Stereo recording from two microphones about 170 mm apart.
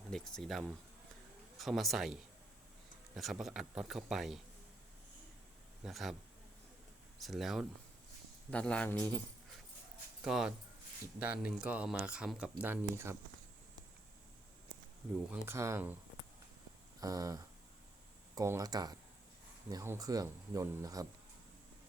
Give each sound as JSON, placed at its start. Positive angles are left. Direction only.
{"t": 0.1, "sound": "speech", "side_deg": 0}
{"t": 3.2, "sound": "speech", "side_deg": 0}
{"t": 5.8, "sound": "speech", "side_deg": 0}
{"t": 7.2, "sound": "speech", "side_deg": 0}
{"t": 10.2, "sound": "speech", "side_deg": -5}
{"t": 15.3, "sound": "speech", "side_deg": -15}
{"t": 17.0, "sound": "speech", "side_deg": -20}